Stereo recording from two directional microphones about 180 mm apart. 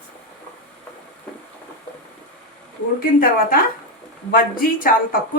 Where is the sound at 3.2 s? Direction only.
50° left (ahead or behind).